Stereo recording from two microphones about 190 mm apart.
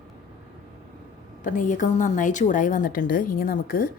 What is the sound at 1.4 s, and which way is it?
A woman's voice, 40° left (ahead or behind).